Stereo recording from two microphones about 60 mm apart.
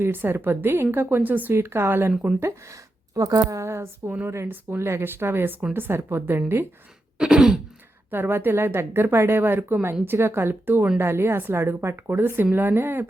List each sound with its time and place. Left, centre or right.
0.0 s a woman's voice: right
1.5 s speech: right
3.2 s speech: right
3.6 s speech: right
4.4 s a woman's voice: right
7.2 s throat clearing: centre
8.1 s a woman's voice: right